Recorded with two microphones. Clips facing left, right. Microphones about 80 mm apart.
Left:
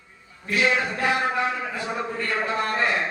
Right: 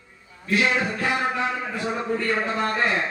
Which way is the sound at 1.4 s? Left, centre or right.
Centre.